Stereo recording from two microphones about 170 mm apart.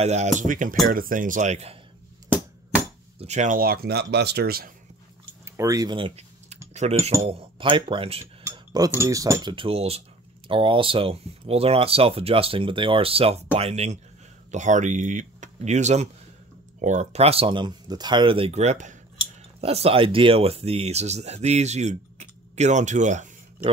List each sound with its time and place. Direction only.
0.0 s speech: 40° right (ahead or behind)
3.2 s speech: 40° right (ahead or behind); by 4.7 s 60° right (ahead or behind)
5.4 s typing: 20° right (ahead or behind); by 6.6 s 35° right (ahead or behind)
6.7 s speech: 40° right (ahead or behind)
8.5 s speech: 20° right (ahead or behind); by 23.7 s 45° right (ahead or behind)